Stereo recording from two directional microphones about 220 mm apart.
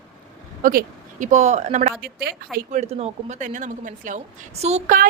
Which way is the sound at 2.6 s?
30° right (ahead or behind).